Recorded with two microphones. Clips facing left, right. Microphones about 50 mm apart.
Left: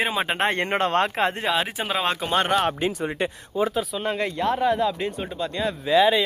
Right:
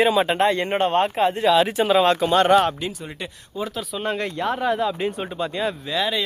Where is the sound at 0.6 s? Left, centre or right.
Left.